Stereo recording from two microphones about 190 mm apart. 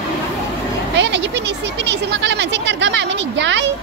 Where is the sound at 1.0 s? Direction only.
70° right (ahead or behind).